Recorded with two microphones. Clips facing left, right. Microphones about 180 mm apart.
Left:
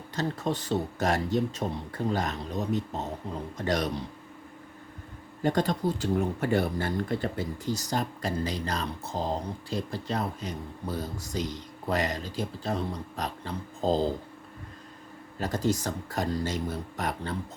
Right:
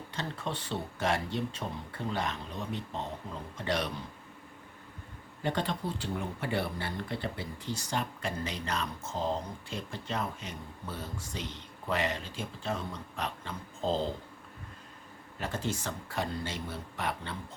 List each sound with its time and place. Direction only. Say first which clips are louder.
0.1 s speech: left 8 dB; 40° left (ahead or behind)
5.4 s speech: left 6 dB; 40° left (ahead or behind)
15.4 s speech: left 7 dB; 40° left (ahead or behind)